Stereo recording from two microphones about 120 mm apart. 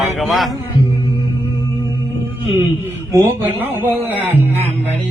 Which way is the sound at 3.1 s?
20° right (ahead or behind).